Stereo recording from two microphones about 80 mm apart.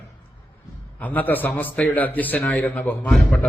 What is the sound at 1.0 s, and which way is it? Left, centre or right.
A man's voice, left.